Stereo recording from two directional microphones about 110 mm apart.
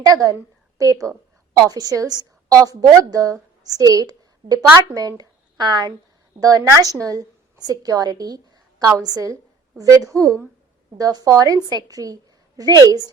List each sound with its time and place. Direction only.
0.0 s a woman's voice: 35° right (ahead or behind)
1.6 s a woman's voice: 35° right (ahead or behind)